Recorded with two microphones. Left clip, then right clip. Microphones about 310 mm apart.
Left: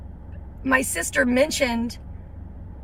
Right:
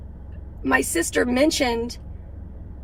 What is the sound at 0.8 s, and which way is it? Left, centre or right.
A woman's voice, right.